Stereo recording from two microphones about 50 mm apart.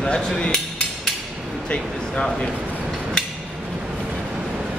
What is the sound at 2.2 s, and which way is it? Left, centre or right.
Speech, centre.